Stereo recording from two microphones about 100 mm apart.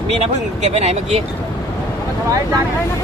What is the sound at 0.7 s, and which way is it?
Speech, 90° right.